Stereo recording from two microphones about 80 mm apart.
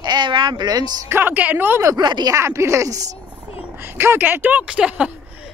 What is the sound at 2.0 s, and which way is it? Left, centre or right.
Speech, right.